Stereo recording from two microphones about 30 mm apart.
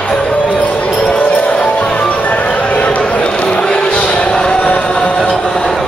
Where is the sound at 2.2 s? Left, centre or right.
Left.